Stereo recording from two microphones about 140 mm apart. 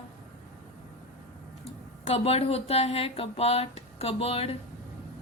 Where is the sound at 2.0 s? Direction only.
45° left (ahead or behind).